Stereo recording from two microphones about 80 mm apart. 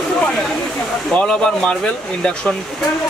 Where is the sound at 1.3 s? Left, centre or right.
Centre.